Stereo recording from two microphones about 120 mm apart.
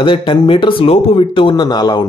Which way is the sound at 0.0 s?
45° left (ahead or behind).